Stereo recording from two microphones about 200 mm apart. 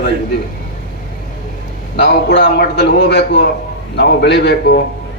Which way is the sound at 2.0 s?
60° left (ahead or behind).